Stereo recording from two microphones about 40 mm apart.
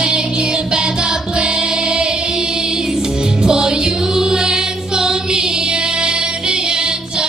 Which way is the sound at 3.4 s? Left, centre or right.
Centre.